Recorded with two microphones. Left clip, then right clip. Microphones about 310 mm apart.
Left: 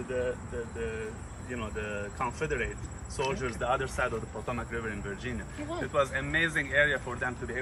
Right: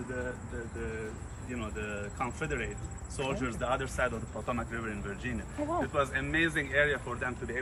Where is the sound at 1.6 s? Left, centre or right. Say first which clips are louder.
Left 2 dB; centre.